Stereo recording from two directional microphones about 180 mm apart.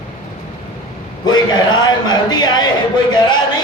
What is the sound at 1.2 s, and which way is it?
A man's voice, 25° left (ahead or behind).